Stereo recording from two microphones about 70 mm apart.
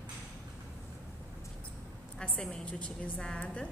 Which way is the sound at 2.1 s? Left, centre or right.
Centre.